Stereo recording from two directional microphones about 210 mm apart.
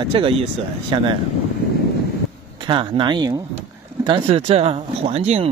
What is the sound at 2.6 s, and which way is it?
Speech, 25° right (ahead or behind).